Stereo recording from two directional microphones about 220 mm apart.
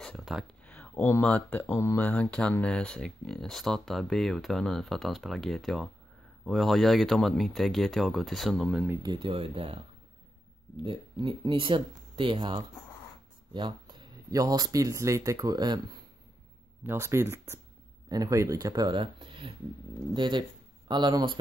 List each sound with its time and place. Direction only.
0.0 s speech: centre (ahead or behind)
9.0 s speech: 20° right (ahead or behind)
10.8 s speech: 20° right (ahead or behind)